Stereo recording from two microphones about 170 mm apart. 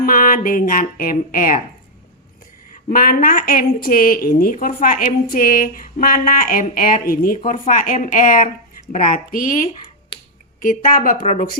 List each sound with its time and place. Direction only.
0.0 s speech: 55° left (ahead or behind)
2.9 s a woman's voice: 55° left (ahead or behind)
10.1 s finger snapping: 30° left (ahead or behind)
10.6 s speech: 55° left (ahead or behind)